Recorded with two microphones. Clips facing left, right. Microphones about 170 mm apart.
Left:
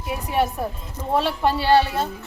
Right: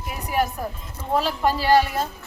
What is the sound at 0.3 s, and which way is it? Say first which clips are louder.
A woman's voice: left 1 dB; 25° left (ahead or behind).